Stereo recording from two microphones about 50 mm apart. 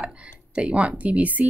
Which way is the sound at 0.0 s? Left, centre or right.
Right.